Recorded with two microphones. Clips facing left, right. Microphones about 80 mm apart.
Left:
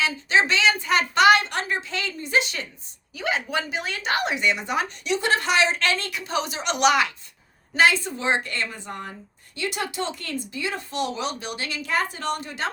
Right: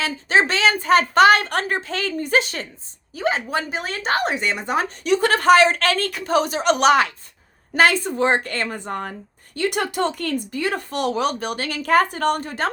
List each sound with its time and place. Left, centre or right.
0.0 s a sound: right
3.2 s speech: right
7.7 s speech: right